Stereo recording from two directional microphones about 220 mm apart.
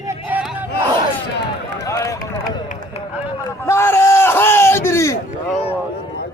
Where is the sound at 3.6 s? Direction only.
10° left (ahead or behind).